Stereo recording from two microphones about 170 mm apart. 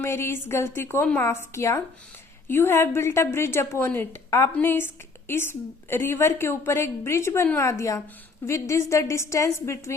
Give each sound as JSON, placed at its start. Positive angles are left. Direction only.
{"t": 0.0, "sound": "a woman's voice", "side_deg": 15}